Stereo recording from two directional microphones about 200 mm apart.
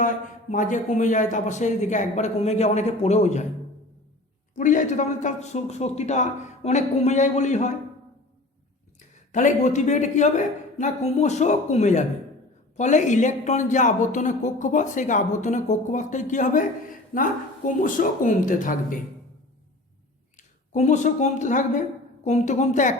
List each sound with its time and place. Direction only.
0.5 s speech: 40° left (ahead or behind)
4.5 s speech: 40° left (ahead or behind)
9.3 s speech: 35° left (ahead or behind)
17.7 s speech: 40° left (ahead or behind)
20.3 s speech: 35° left (ahead or behind)